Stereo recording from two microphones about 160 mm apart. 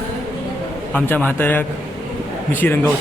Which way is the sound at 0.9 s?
10° left (ahead or behind).